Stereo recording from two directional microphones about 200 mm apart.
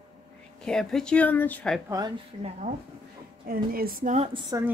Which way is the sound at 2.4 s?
35° right (ahead or behind).